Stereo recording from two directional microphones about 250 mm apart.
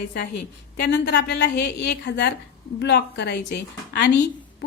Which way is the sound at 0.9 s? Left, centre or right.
Left.